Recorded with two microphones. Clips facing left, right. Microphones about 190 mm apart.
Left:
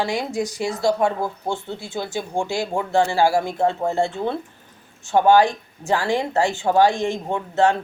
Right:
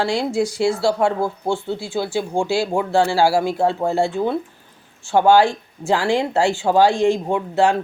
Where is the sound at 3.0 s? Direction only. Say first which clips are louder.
Right 1 dB; 10° right (ahead or behind).